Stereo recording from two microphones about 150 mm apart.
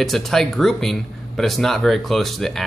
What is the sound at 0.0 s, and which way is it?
Speech, centre (ahead or behind).